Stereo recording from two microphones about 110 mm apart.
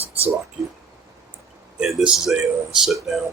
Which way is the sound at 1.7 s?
5° right (ahead or behind).